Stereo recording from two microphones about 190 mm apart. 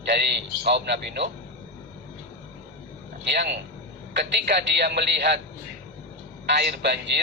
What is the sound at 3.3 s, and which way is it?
A man's voice, 65° right (ahead or behind).